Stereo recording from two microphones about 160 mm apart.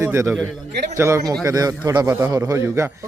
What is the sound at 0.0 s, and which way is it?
A man's voice, 15° right (ahead or behind).